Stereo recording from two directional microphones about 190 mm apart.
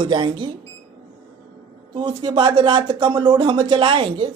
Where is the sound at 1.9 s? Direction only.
25° right (ahead or behind).